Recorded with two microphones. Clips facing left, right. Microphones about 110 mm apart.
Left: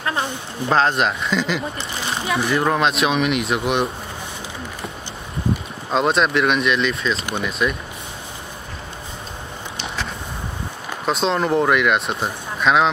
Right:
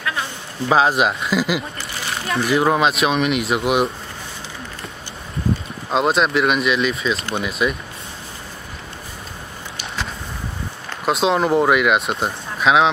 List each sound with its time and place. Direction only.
0.7 s speech: 5° right (ahead or behind)
1.8 s a sound: 25° left (ahead or behind)
2.2 s speech: centre (ahead or behind)
5.9 s speech: centre (ahead or behind)
11.1 s speech: 5° right (ahead or behind)